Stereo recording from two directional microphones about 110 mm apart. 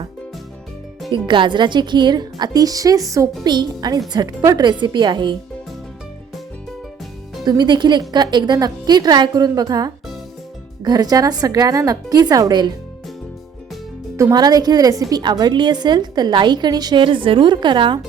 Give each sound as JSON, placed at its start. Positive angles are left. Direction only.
{"t": 1.1, "sound": "a woman's voice", "side_deg": -45}
{"t": 7.4, "sound": "a woman's voice", "side_deg": -40}
{"t": 14.2, "sound": "a woman's voice", "side_deg": -30}